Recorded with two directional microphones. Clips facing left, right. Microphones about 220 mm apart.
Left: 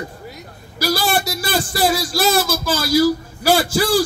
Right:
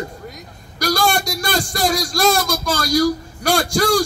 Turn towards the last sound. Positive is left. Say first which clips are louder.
# left 1 dB
turn(degrees=5)  # may be behind; listen again after turning